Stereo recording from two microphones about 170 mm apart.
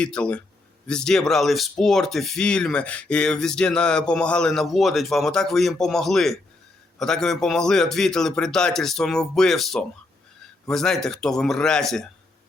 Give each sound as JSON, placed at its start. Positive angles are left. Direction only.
{"t": 0.0, "sound": "speech", "side_deg": 5}